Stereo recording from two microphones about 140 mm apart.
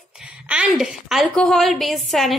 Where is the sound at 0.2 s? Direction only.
5° right (ahead or behind).